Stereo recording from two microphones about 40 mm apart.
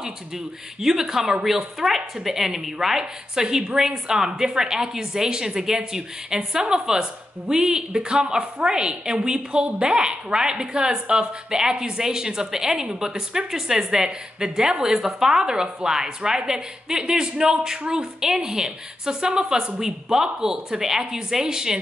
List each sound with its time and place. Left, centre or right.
0.7 s a woman's voice: centre